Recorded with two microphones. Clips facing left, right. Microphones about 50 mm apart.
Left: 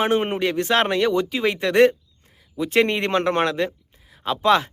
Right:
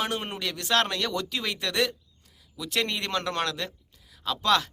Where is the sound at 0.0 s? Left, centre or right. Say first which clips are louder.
Left 10 dB; left.